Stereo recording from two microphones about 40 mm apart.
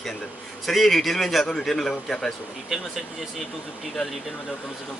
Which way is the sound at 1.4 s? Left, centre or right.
Centre.